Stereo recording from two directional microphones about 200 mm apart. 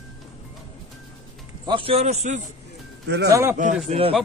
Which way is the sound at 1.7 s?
25° right (ahead or behind).